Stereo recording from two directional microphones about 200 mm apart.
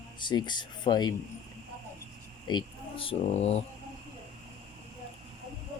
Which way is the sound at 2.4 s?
25° left (ahead or behind).